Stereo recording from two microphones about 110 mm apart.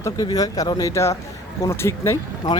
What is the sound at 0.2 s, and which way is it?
Speech, 35° left (ahead or behind).